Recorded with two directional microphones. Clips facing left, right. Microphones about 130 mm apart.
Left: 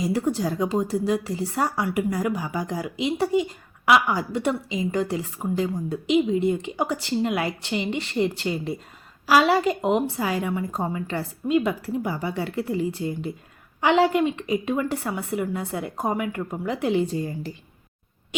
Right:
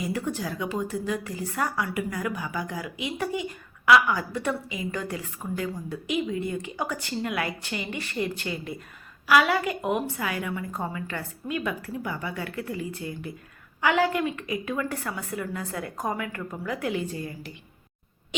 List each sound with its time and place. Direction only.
0.4 s a woman's voice: 30° left (ahead or behind)